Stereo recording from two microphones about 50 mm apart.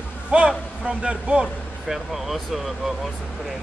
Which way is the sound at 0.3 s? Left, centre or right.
Centre.